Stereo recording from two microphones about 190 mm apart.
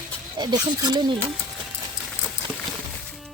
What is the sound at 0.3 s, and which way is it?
Speech, 20° right (ahead or behind).